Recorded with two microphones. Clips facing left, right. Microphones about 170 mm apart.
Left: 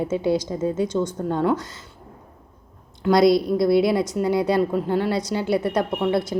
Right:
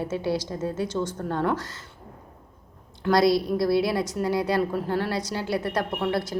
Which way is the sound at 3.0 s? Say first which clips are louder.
Left 4 dB; 20° left (ahead or behind).